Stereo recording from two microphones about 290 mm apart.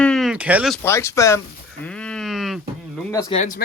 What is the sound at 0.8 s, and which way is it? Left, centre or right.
Speech, centre.